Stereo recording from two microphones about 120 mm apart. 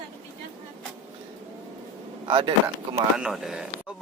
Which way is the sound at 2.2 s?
50° right (ahead or behind).